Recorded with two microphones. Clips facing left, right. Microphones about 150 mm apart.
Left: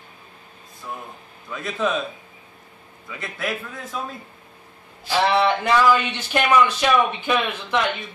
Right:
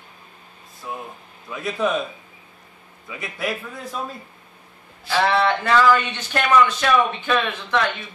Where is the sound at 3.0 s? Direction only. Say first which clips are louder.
Right 1 dB; 5° right (ahead or behind).